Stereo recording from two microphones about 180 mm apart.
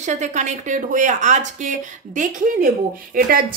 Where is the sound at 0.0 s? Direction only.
40° right (ahead or behind).